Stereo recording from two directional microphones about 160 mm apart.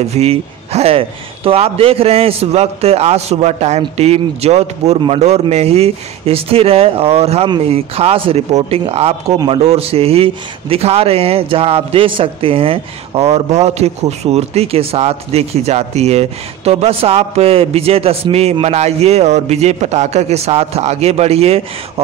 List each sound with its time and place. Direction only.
0.1 s speech: 40° right (ahead or behind)